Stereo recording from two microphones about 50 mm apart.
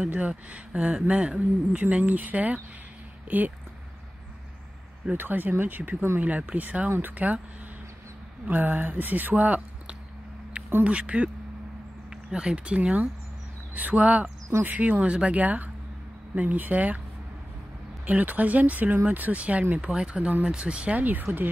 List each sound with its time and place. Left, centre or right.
0.0 s speech: right
5.1 s speech: right
8.5 s speech: right
10.8 s speech: right
12.3 s speech: centre
18.0 s speech: right